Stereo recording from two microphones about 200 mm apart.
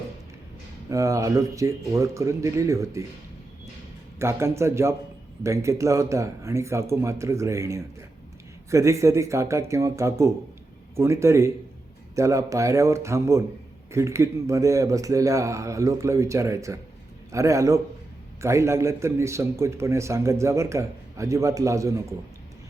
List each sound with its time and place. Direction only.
0.9 s a man's voice: 15° right (ahead or behind)
4.2 s a man's voice: 15° right (ahead or behind)